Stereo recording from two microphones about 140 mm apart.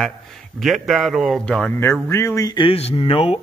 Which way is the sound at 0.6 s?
Centre (ahead or behind).